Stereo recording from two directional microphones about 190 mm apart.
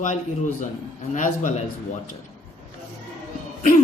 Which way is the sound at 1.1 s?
45° left (ahead or behind).